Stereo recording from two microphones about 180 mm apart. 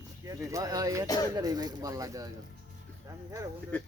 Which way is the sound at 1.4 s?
20° right (ahead or behind).